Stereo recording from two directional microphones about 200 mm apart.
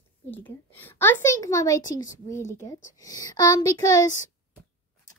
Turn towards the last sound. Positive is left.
turn(degrees=15)  # may be behind; listen again after turning